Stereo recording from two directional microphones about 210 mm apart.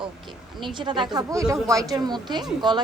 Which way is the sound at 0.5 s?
20° right (ahead or behind).